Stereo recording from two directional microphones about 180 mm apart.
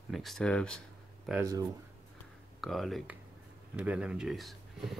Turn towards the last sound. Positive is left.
turn(degrees=0)  # may be behind; listen again after turning